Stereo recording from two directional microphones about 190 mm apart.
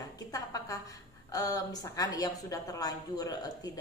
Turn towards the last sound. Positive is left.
turn(degrees=20)  # may be behind; listen again after turning